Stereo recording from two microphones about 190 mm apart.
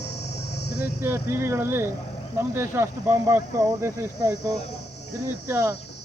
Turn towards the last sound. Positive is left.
turn(degrees=-15)  # may be behind; listen again after turning